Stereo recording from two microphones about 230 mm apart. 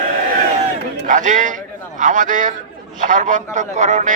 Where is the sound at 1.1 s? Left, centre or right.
Right.